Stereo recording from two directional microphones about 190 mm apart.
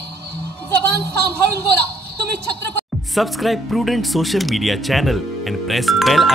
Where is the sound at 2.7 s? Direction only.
Centre (ahead or behind).